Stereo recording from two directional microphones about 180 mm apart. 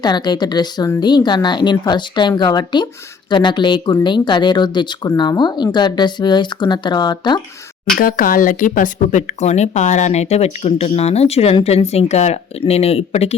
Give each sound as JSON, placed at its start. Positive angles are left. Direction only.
{"t": 0.0, "sound": "speech", "side_deg": 25}
{"t": 7.9, "sound": "speech", "side_deg": 50}